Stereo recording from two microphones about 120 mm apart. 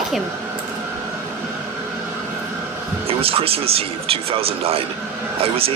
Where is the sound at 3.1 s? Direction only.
55° right (ahead or behind).